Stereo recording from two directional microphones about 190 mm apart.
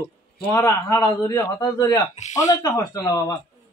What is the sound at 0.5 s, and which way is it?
A man's voice, 15° left (ahead or behind).